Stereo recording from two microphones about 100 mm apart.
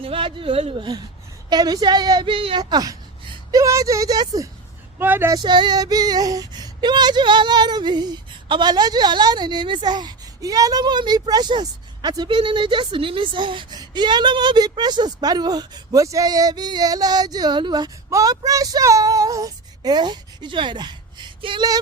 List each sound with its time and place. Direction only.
0.0 s speech: 65° right (ahead or behind)
1.5 s female singing: 40° right (ahead or behind)
2.2 s speech: 60° right (ahead or behind)
2.6 s female singing: 45° right (ahead or behind)
3.5 s speech: 35° right (ahead or behind)
4.9 s speech: 20° right (ahead or behind)
5.3 s female singing: 45° right (ahead or behind)
18.1 s speech: 35° right (ahead or behind); by 21.6 s 50° right (ahead or behind)